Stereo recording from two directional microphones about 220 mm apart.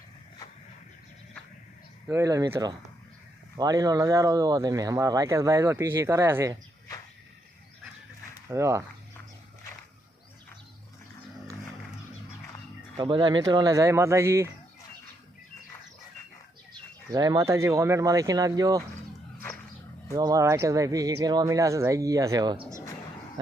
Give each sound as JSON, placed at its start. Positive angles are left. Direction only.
{"t": 2.0, "sound": "speech", "side_deg": -15}
{"t": 8.4, "sound": "speech", "side_deg": -15}
{"t": 13.0, "sound": "speech", "side_deg": -20}
{"t": 17.1, "sound": "speech", "side_deg": -15}
{"t": 20.1, "sound": "speech", "side_deg": -15}